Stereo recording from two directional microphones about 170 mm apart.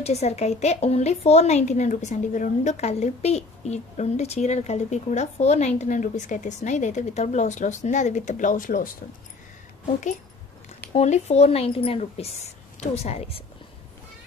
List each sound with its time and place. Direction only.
0.0 s a woman's voice: 40° left (ahead or behind)
10.9 s speech: 40° left (ahead or behind)